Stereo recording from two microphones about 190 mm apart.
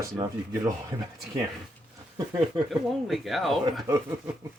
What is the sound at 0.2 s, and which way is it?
Speech, 20° right (ahead or behind).